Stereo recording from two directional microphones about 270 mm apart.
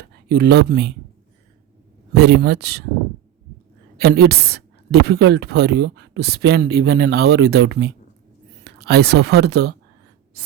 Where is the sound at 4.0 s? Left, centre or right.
Right.